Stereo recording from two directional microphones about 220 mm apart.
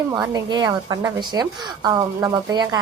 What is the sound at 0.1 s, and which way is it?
A woman's voice, 15° right (ahead or behind).